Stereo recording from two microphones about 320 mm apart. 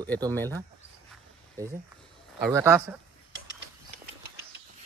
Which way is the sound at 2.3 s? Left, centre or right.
Centre.